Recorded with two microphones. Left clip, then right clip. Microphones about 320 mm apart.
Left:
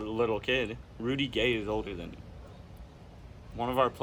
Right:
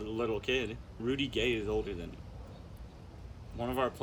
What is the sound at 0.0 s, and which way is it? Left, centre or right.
Speech, centre.